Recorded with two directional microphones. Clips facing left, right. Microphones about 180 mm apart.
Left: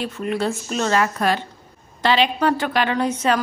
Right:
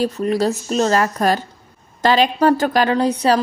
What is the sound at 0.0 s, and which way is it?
A woman's voice, 40° right (ahead or behind).